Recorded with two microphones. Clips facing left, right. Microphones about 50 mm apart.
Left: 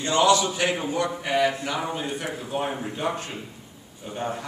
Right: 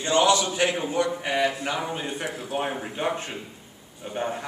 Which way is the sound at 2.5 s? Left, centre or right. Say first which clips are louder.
Even; right.